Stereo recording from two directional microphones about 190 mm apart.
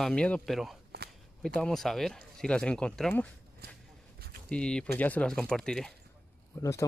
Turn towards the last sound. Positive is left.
turn(degrees=15)  # may be behind; listen again after turning